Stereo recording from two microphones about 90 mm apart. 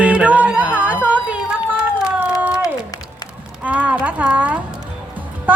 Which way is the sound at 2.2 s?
20° right (ahead or behind).